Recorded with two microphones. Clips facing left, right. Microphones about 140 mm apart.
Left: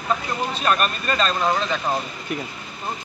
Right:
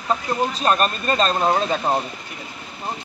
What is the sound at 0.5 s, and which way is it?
A man's voice, 35° right (ahead or behind).